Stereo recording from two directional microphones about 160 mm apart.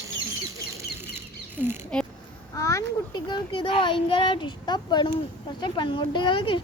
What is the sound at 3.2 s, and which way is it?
A woman's voice, 30° left (ahead or behind).